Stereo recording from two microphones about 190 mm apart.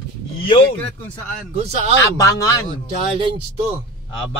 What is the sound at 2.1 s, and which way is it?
Speech, 20° left (ahead or behind).